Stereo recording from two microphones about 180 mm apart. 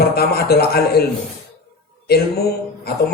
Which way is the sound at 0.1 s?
60° left (ahead or behind).